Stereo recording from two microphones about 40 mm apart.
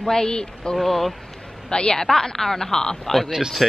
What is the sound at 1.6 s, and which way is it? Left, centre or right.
A man's voice, left.